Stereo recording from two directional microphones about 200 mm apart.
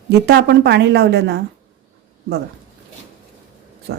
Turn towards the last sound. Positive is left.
turn(degrees=-50)  # may be behind; listen again after turning